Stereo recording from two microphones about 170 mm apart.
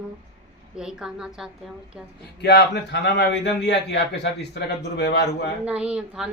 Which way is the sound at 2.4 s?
80° left.